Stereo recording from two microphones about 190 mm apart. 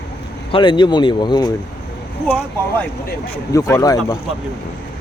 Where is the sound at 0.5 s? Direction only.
25° left (ahead or behind).